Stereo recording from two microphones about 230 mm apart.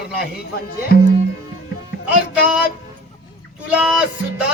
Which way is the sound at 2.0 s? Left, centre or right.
Centre.